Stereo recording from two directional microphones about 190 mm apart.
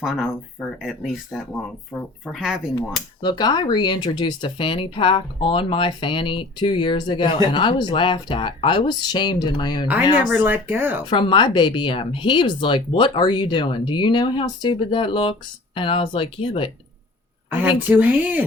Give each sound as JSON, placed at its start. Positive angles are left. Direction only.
{"t": 0.0, "sound": "speech", "side_deg": 0}
{"t": 1.9, "sound": "speech", "side_deg": 0}
{"t": 3.2, "sound": "speech", "side_deg": 20}
{"t": 10.3, "sound": "speech", "side_deg": -10}
{"t": 11.0, "sound": "speech", "side_deg": 25}
{"t": 17.5, "sound": "speech", "side_deg": -10}